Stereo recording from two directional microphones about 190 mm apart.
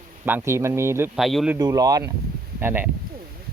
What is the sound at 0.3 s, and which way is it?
Speech, 10° right (ahead or behind).